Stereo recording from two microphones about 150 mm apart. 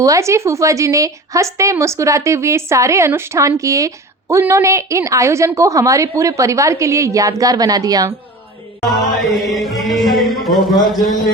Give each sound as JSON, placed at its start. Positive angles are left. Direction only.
{"t": 0.0, "sound": "a woman's voice", "side_deg": -20}
{"t": 8.8, "sound": "music", "side_deg": 0}